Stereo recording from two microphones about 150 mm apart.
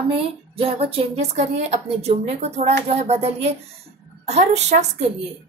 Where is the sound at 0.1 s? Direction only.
40° right (ahead or behind).